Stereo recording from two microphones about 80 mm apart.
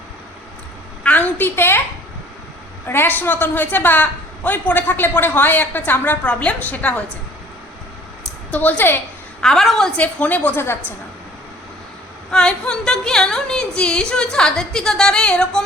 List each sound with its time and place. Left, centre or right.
1.0 s a woman's voice: left
2.8 s a woman's voice: left
8.4 s a woman's voice: left
9.4 s a woman's voice: centre
10.0 s a woman's voice: centre
12.3 s a woman's voice: centre